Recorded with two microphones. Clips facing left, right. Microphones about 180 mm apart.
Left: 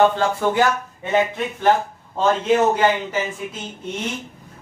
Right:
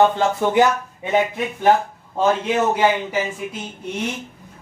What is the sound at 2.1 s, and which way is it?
Speech, 10° right (ahead or behind).